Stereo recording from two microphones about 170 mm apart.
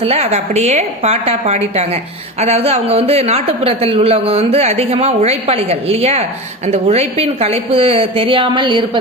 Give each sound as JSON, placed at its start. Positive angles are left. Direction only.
{"t": 0.0, "sound": "a woman's voice", "side_deg": -35}